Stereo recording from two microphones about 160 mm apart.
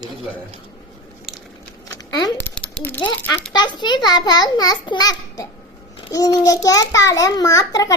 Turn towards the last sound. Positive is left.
turn(degrees=25)  # may be behind; listen again after turning